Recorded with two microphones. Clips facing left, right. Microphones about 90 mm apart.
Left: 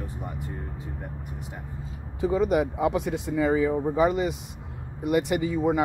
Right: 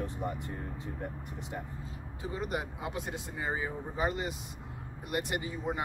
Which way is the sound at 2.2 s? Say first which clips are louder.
Left 13 dB; 85° left.